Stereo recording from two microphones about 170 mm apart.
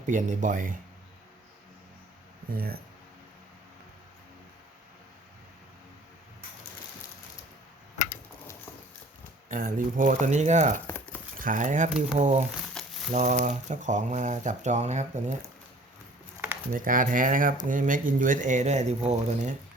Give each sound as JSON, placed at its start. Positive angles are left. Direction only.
{"t": 0.0, "sound": "speech", "side_deg": -45}
{"t": 2.5, "sound": "speech", "side_deg": -60}
{"t": 9.5, "sound": "speech", "side_deg": -50}
{"t": 10.8, "sound": "a sound", "side_deg": 10}
{"t": 11.3, "sound": "speech", "side_deg": -50}
{"t": 12.8, "sound": "crumpling", "side_deg": 5}
{"t": 13.1, "sound": "speech", "side_deg": -45}
{"t": 16.7, "sound": "speech", "side_deg": -55}